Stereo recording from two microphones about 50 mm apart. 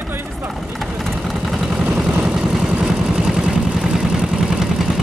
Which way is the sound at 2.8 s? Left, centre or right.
Centre.